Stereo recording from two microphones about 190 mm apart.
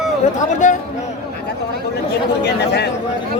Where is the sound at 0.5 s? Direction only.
40° left (ahead or behind).